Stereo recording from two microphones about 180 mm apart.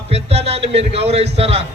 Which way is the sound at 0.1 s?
35° right (ahead or behind).